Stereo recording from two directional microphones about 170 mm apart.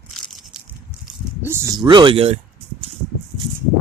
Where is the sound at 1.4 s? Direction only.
15° right (ahead or behind); by 2.3 s 30° right (ahead or behind).